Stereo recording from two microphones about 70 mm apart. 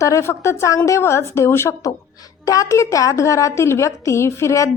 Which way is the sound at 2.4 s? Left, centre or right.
Left.